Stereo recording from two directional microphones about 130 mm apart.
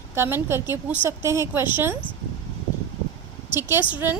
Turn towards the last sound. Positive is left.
turn(degrees=-15)  # may be behind; listen again after turning